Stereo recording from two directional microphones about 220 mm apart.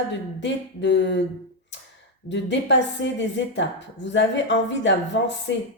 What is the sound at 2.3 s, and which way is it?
A woman's voice, 55° left (ahead or behind).